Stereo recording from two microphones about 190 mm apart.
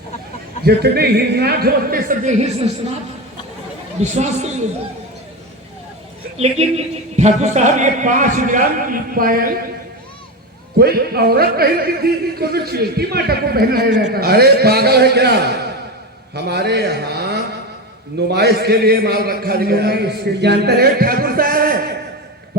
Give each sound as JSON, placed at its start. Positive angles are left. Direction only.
{"t": 0.6, "sound": "a man's voice", "side_deg": -55}
{"t": 4.0, "sound": "a man's voice", "side_deg": -35}
{"t": 6.4, "sound": "a man's voice", "side_deg": -35}
{"t": 10.8, "sound": "a man's voice", "side_deg": -55}